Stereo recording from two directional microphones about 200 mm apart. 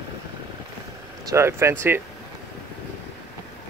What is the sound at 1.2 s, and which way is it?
Speech, 15° right (ahead or behind).